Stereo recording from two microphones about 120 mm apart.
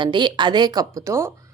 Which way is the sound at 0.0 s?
40° right (ahead or behind).